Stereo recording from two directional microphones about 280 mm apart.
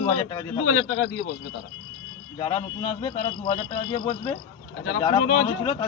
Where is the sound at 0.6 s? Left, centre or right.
Left.